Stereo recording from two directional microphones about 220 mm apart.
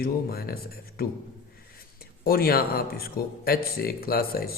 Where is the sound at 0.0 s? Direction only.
45° left (ahead or behind).